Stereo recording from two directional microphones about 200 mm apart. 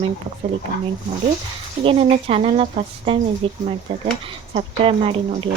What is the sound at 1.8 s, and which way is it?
Speech, 25° right (ahead or behind).